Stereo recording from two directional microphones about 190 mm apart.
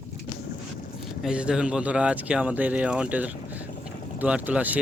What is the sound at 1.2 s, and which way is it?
Speech, 5° right (ahead or behind).